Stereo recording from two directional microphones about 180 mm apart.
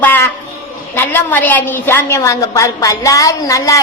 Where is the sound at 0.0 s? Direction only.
10° left (ahead or behind).